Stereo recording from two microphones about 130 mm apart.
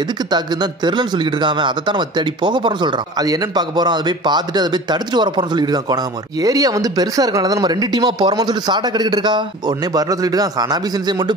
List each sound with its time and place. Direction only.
0.3 s speech: 35° right (ahead or behind)